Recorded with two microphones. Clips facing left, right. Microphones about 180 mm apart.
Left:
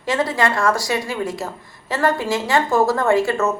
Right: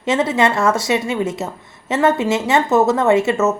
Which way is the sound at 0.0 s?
25° right (ahead or behind).